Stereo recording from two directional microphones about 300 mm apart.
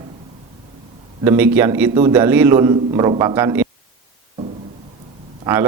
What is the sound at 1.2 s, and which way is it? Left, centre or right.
A man's voice, centre.